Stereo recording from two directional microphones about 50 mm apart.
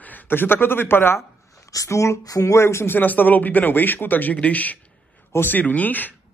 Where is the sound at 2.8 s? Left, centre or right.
Left.